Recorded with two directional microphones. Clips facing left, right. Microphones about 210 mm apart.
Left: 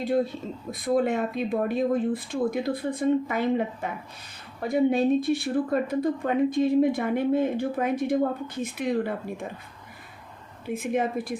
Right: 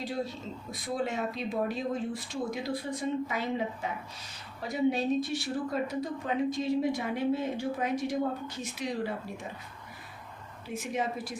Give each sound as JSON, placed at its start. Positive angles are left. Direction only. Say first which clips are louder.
{"t": 0.0, "sound": "a woman's voice", "louder": "left 9 dB", "side_deg": 55}
{"t": 10.7, "sound": "a woman's voice", "louder": "left 7 dB", "side_deg": 55}